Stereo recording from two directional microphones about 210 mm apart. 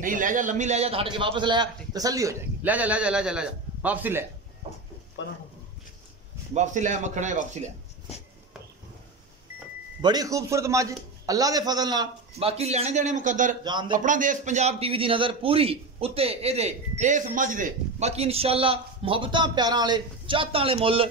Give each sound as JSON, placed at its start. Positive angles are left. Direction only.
{"t": 0.0, "sound": "a man's voice", "side_deg": -40}
{"t": 5.2, "sound": "a man's voice", "side_deg": 60}
{"t": 6.5, "sound": "a man's voice", "side_deg": -35}
{"t": 10.0, "sound": "a man's voice", "side_deg": -15}
{"t": 13.7, "sound": "a man's voice", "side_deg": -20}
{"t": 13.9, "sound": "a man's voice", "side_deg": -40}